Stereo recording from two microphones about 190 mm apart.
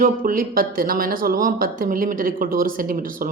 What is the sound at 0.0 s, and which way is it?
Speech, 50° right (ahead or behind).